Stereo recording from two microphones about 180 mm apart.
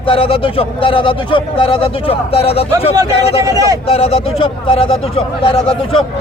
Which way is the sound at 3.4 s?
20° right (ahead or behind).